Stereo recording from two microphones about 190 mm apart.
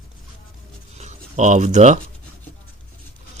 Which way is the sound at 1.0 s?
35° right (ahead or behind).